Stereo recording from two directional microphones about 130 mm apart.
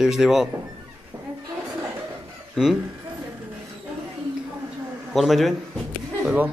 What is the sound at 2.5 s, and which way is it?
Speech, centre (ahead or behind).